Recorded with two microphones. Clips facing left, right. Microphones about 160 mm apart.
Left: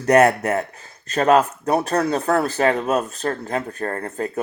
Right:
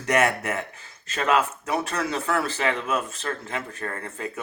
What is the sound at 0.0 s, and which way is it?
Speech, 35° left (ahead or behind).